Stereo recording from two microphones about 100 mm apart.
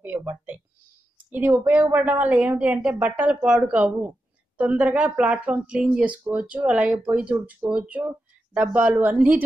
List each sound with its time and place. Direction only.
0.0 s a woman's voice: 15° right (ahead or behind)
8.0 s a sound: 20° right (ahead or behind)
8.7 s a woman's voice: 15° right (ahead or behind)